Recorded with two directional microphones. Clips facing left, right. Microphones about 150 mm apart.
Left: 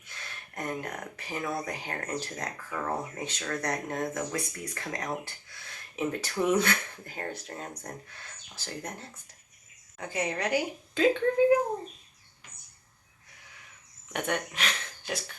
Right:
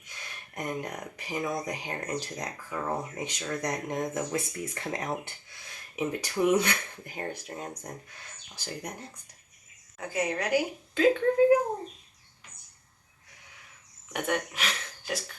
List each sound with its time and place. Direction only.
0.5 s speech: 15° right (ahead or behind)
6.0 s a woman's voice: 15° right (ahead or behind)
14.1 s speech: 5° right (ahead or behind)